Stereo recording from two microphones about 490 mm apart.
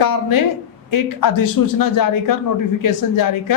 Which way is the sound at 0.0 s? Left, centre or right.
Left.